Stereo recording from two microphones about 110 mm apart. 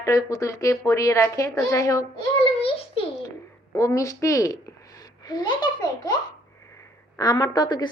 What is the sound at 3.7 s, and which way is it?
A woman's voice, 30° left (ahead or behind).